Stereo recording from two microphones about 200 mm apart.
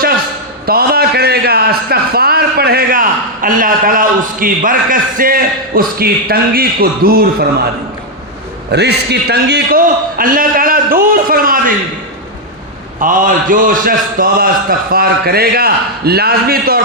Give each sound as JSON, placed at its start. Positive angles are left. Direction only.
{"t": 0.6, "sound": "a man's voice", "side_deg": -50}
{"t": 8.7, "sound": "a man's voice", "side_deg": -55}
{"t": 13.0, "sound": "a man's voice", "side_deg": -40}